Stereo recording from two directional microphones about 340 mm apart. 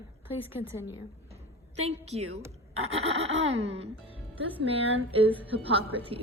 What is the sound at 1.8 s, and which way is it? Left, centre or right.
A woman's voice, centre.